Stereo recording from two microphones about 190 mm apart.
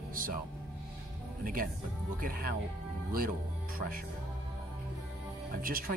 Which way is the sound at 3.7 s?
45° right (ahead or behind).